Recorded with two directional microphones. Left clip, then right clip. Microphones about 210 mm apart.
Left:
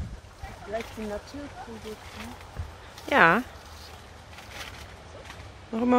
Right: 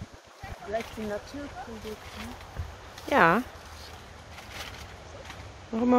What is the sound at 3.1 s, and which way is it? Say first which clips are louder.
Speech: left 2 dB; centre (ahead or behind).